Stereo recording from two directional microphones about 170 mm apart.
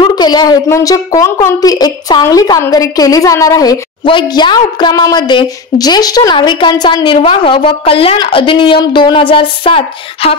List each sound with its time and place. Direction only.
0.0 s a woman's voice: 25° left (ahead or behind)